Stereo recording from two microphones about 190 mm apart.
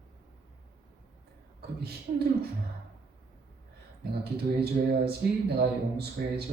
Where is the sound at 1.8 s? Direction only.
55° right (ahead or behind).